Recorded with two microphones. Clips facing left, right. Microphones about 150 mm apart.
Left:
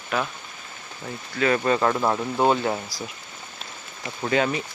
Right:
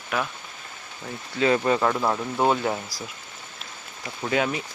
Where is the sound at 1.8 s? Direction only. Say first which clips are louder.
Left 1 dB; 5° left (ahead or behind).